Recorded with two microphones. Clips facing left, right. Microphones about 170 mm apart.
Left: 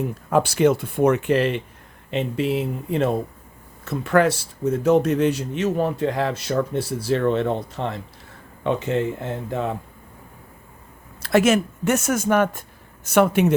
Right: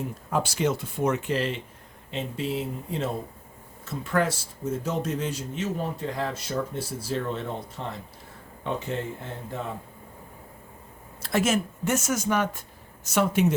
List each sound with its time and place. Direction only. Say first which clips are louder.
0.3 s a man's voice: left 8 dB; 65° left (ahead or behind); by 9.7 s 85° left
11.2 s speech: left 7 dB; 70° left (ahead or behind)